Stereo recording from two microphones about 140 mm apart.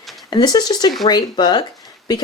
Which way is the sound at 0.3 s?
30° left (ahead or behind).